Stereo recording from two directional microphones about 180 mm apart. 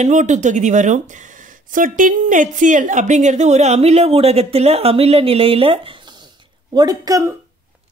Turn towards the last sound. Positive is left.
turn(degrees=-20)  # may be behind; listen again after turning